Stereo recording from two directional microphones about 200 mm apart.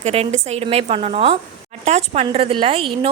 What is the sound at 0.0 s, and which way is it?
A woman's voice, 35° right (ahead or behind).